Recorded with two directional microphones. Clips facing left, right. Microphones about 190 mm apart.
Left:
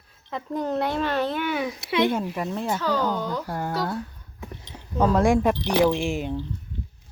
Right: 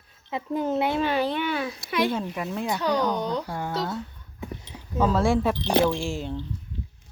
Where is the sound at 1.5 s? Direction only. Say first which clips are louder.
Left 3 dB; 15° left (ahead or behind).